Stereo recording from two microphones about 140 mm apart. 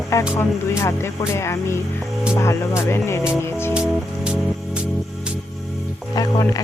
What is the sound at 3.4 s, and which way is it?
Music, 15° left (ahead or behind).